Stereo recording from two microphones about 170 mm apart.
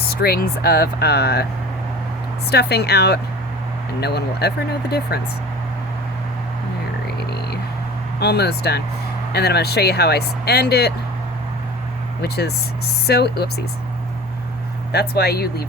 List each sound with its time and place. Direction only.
0.0 s speech: 65° left (ahead or behind)
2.5 s speech: 75° left (ahead or behind)
8.2 s speech: 70° left (ahead or behind)
12.2 s speech: 70° left (ahead or behind)
14.9 s speech: 70° left (ahead or behind)